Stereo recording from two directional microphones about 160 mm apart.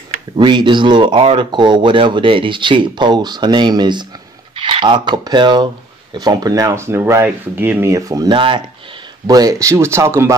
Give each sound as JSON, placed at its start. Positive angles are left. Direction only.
{"t": 0.4, "sound": "speech", "side_deg": -30}